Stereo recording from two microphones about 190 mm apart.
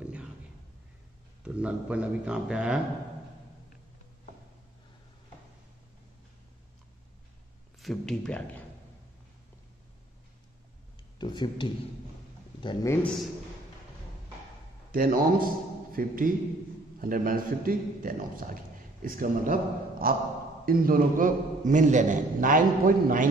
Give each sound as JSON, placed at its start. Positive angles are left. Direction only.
{"t": 0.0, "sound": "a sound", "side_deg": -5}
{"t": 1.4, "sound": "speech", "side_deg": -5}
{"t": 7.8, "sound": "speech", "side_deg": 0}
{"t": 11.1, "sound": "speech", "side_deg": 25}
{"t": 14.9, "sound": "a man's voice", "side_deg": -50}